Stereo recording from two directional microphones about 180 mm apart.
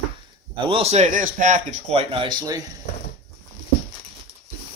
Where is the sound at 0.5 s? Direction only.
30° right (ahead or behind).